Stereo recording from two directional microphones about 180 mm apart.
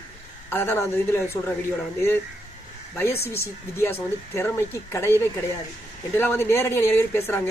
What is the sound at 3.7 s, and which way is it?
Speech, 15° left (ahead or behind).